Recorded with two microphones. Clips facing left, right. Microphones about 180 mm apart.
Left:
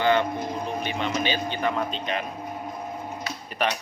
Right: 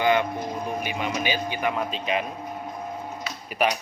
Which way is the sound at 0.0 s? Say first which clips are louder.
Even; 15° right (ahead or behind).